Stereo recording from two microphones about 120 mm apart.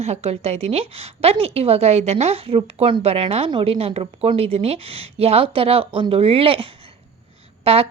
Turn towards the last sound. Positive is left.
turn(degrees=-55)  # may be behind; listen again after turning